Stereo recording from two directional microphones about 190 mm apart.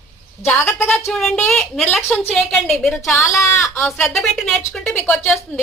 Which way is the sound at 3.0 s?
15° left (ahead or behind).